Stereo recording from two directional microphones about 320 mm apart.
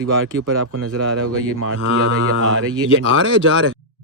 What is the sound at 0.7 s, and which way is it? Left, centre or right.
Cattle, right.